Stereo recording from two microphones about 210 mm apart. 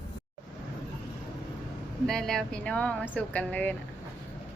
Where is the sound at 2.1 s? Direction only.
5° left (ahead or behind).